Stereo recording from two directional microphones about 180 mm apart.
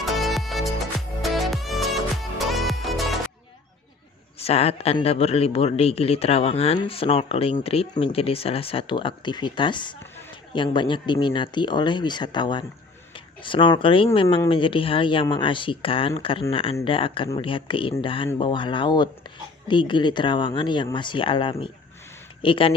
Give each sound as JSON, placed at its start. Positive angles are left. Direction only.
{"t": 0.0, "sound": "music", "side_deg": 0}
{"t": 4.4, "sound": "speech", "side_deg": 35}